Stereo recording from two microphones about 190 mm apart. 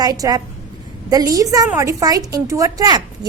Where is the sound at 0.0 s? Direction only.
20° right (ahead or behind).